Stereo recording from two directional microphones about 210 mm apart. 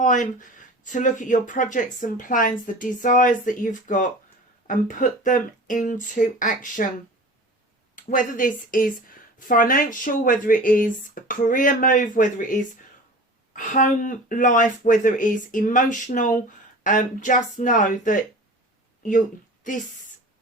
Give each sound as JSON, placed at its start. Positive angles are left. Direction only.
{"t": 0.0, "sound": "a woman's voice", "side_deg": 35}
{"t": 7.9, "sound": "a woman's voice", "side_deg": 40}